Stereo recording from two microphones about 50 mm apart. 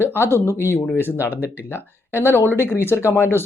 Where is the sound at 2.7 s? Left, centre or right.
Left.